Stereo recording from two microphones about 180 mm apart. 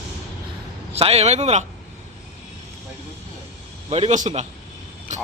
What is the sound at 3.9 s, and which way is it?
Speech, 40° right (ahead or behind).